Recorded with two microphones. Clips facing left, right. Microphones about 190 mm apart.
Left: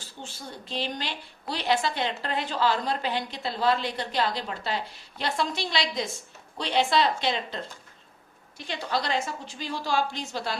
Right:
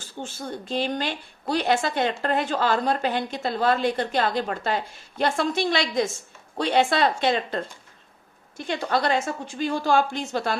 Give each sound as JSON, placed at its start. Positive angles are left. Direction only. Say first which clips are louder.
{"t": 0.2, "sound": "a woman's voice", "louder": "right 8 dB", "side_deg": -50}